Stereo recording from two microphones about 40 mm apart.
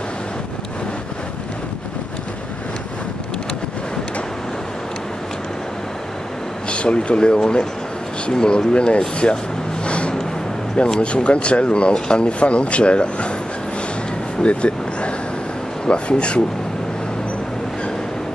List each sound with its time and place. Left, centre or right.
6.7 s speech: left
9.8 s a sound: left
11.0 s speech: left
14.4 s vehicle: left
15.9 s speech: left